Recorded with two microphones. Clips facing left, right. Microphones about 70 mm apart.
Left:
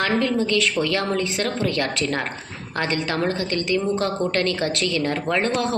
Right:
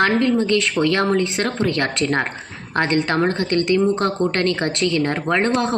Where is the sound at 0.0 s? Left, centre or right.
Right.